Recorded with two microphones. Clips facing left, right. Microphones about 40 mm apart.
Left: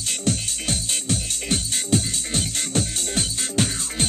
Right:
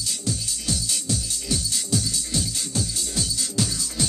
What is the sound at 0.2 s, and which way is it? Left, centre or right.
Music, left.